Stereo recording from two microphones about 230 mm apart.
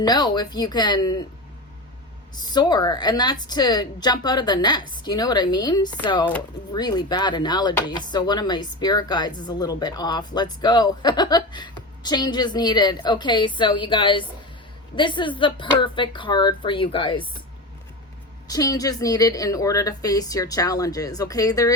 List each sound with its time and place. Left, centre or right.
0.0 s a woman's voice: centre
2.3 s a woman's voice: centre
18.4 s a woman's voice: centre